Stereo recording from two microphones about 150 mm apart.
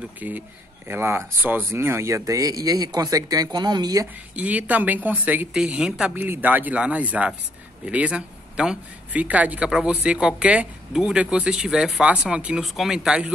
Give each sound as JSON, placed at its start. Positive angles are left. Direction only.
{"t": 0.2, "sound": "speech", "side_deg": -10}
{"t": 4.4, "sound": "speech", "side_deg": -10}